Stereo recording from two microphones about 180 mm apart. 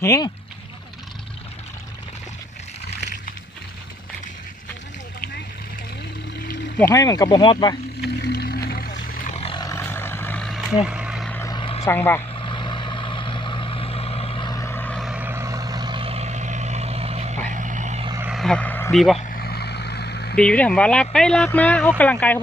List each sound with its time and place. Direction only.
0.0 s speech: 15° left (ahead or behind)
6.7 s speech: 15° left (ahead or behind)
8.0 s a sound: 65° left (ahead or behind); by 9.4 s 50° left (ahead or behind)
9.4 s vehicle: 25° left (ahead or behind); by 11.3 s 5° right (ahead or behind)
11.3 s vehicle: 15° left (ahead or behind)
11.5 s vehicle: 30° left (ahead or behind); by 15.1 s 5° left (ahead or behind)
15.1 s vehicle: 10° right (ahead or behind); by 18.0 s 40° right (ahead or behind)
18.2 s vehicle: centre (ahead or behind)
19.3 s vehicle: 60° left (ahead or behind)
20.5 s speech: 5° left (ahead or behind)